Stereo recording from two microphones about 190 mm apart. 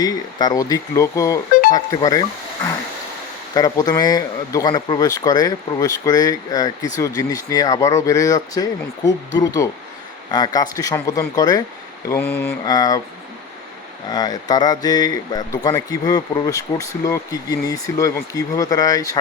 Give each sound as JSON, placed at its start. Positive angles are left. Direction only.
{"t": 0.0, "sound": "speech", "side_deg": 20}
{"t": 3.5, "sound": "speech", "side_deg": 20}
{"t": 14.1, "sound": "speech", "side_deg": 20}